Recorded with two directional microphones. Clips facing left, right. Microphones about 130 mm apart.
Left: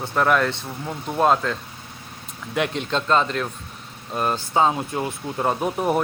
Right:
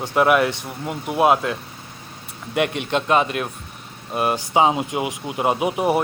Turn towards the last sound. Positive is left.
turn(degrees=-10)  # may be behind; listen again after turning